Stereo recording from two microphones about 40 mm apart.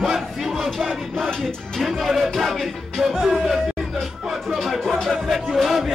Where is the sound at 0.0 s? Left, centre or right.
Centre.